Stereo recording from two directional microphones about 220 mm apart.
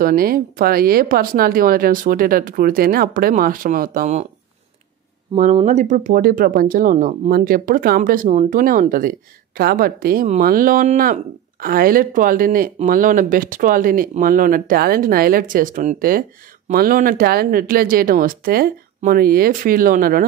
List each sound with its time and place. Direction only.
0.0 s speech: 40° right (ahead or behind)
5.3 s speech: 30° right (ahead or behind)